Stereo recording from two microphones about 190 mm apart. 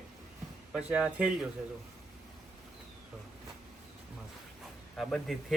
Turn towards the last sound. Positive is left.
turn(degrees=0)  # may be behind; listen again after turning